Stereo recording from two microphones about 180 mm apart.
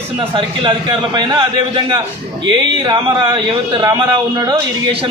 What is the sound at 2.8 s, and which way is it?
A man's voice, 25° right (ahead or behind).